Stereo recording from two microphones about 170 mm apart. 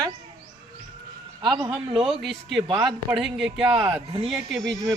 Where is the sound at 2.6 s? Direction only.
25° right (ahead or behind).